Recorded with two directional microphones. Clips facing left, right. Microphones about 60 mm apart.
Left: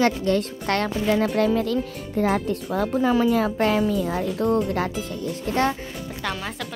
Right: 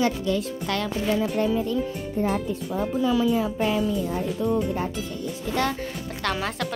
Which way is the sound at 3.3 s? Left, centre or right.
Left.